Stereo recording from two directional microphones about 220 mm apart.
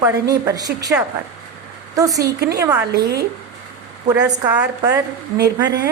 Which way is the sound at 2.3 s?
45° right (ahead or behind).